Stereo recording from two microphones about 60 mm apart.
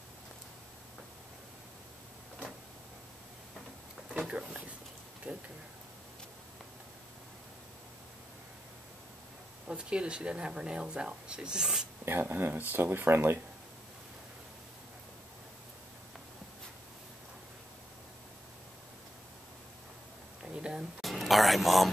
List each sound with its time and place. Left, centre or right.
4.2 s speech: centre
5.2 s speech: right
9.7 s speech: centre
12.0 s speech: right
20.4 s a sound: centre
21.0 s a sound: centre